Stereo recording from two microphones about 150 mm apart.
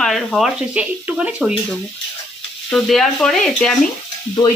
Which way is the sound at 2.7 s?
Centre (ahead or behind).